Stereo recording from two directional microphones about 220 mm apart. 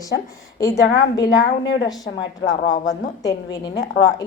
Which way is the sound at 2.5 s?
15° left (ahead or behind).